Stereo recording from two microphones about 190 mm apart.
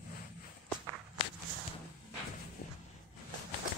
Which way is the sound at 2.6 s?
50° left (ahead or behind).